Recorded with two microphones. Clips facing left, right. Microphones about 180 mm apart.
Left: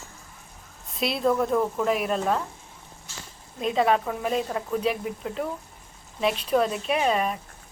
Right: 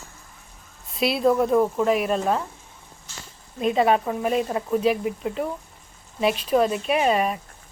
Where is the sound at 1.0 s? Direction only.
5° right (ahead or behind).